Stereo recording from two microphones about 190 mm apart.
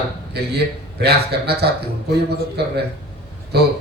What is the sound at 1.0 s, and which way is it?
A man's voice, 60° right (ahead or behind).